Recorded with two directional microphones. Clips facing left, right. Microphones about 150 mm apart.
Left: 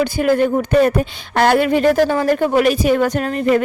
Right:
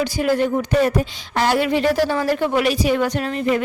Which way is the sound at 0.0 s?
55° left (ahead or behind).